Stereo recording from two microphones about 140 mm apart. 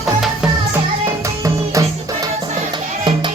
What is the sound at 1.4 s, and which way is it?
Music, 25° right (ahead or behind).